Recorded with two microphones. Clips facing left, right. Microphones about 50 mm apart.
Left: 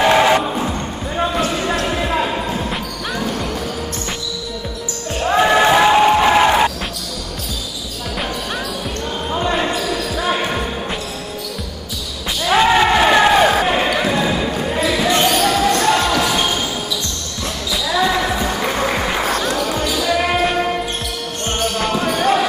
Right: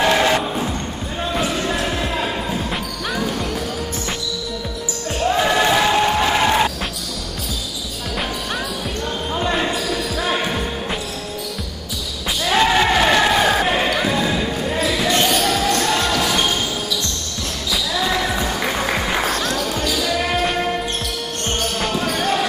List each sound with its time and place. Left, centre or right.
0.1 s music: centre
1.5 s basketball bounce: centre
1.9 s music: centre
5.2 s music: centre
9.3 s basketball bounce: centre
12.4 s basketball bounce: centre
17.9 s music: centre
20.4 s basketball bounce: centre